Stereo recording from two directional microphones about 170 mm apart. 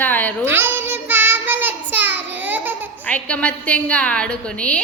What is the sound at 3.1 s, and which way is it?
A woman's voice, 5° left (ahead or behind).